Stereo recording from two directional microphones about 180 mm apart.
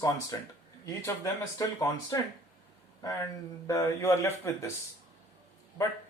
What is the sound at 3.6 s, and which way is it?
Speech, 15° left (ahead or behind).